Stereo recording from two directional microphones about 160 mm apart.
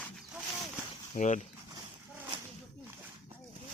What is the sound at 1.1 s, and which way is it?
Speech, 50° left (ahead or behind).